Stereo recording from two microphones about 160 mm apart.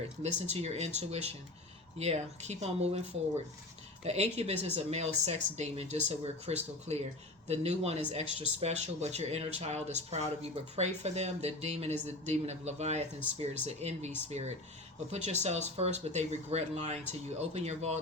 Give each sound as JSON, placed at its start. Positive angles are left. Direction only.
{"t": 0.2, "sound": "speech", "side_deg": -45}
{"t": 4.0, "sound": "speech", "side_deg": -40}